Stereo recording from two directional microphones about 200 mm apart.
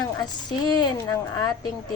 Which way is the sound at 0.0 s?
20° left (ahead or behind).